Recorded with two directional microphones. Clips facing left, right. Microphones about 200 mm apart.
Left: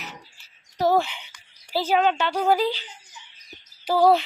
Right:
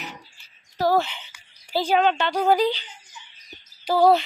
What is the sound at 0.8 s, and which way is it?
Speech, 20° left (ahead or behind).